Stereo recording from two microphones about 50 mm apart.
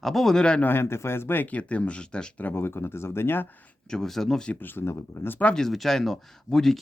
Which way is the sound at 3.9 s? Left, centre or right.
Centre.